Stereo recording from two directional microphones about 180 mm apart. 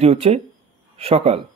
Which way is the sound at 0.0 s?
35° right (ahead or behind).